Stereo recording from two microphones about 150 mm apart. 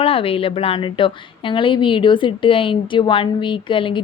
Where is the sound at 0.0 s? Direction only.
40° left (ahead or behind).